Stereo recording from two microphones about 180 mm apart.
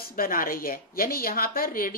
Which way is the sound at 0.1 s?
50° left (ahead or behind).